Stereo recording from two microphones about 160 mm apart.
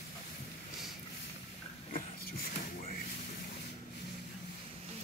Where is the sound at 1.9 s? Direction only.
65° left (ahead or behind).